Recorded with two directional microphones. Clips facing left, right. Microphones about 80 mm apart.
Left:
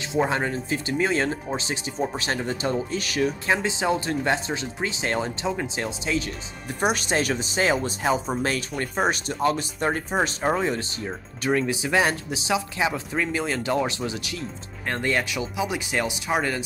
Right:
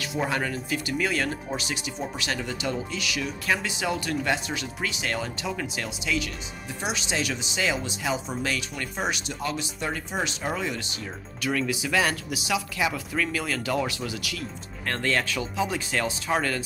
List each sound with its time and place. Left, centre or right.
0.0 s speech: left
3.4 s speech: left
6.8 s speech: left; by 16.6 s centre